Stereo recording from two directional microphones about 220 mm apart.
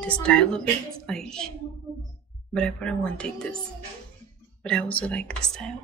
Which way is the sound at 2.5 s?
5° left (ahead or behind).